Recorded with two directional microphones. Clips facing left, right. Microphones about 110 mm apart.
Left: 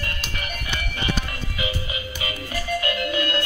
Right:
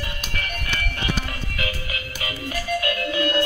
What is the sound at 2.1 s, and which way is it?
Music, centre (ahead or behind).